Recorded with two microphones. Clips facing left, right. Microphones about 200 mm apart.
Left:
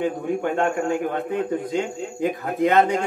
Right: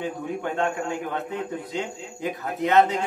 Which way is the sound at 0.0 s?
50° left (ahead or behind).